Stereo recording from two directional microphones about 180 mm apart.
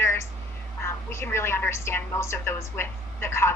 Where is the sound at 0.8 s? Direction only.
15° left (ahead or behind).